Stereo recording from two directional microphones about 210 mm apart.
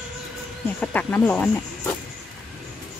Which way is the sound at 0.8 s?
5° left (ahead or behind).